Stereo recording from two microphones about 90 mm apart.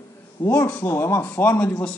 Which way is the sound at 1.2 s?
15° left (ahead or behind).